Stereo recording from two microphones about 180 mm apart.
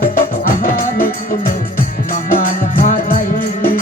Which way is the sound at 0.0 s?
55° left (ahead or behind).